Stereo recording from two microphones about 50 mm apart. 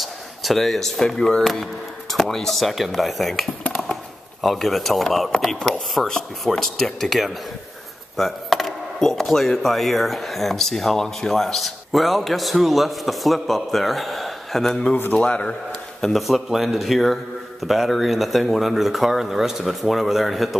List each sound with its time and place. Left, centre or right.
0.0 s speech: centre
1.4 s speech: centre
15.1 s a man's voice: left
16.0 s speech: centre